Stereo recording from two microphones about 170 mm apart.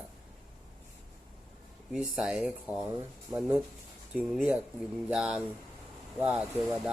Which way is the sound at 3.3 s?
15° right (ahead or behind).